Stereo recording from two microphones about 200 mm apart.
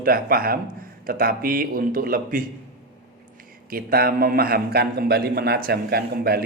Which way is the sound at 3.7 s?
50° right (ahead or behind).